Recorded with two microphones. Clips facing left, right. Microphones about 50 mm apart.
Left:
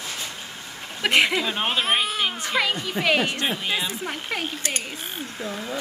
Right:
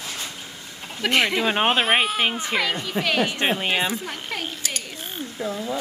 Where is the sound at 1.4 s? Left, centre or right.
Right.